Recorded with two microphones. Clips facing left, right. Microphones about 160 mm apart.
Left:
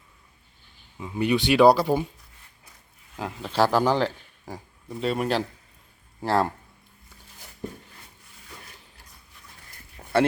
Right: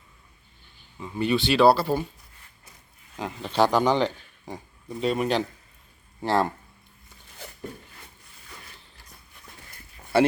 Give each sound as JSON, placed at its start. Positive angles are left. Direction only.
{"t": 0.9, "sound": "speech", "side_deg": 10}
{"t": 3.2, "sound": "a man's voice", "side_deg": 0}
{"t": 10.0, "sound": "walk", "side_deg": 55}